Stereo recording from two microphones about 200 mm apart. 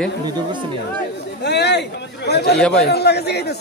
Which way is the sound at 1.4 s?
60° left (ahead or behind).